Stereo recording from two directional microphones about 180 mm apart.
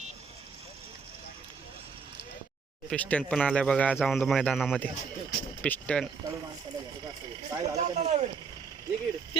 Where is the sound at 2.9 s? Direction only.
10° left (ahead or behind).